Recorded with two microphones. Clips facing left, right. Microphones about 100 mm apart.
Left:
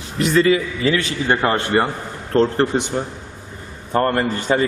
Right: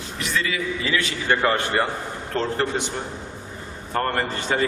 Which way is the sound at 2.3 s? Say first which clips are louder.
Left 8 dB; 35° left (ahead or behind).